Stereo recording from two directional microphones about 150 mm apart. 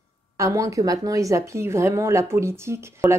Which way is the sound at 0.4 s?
20° right (ahead or behind).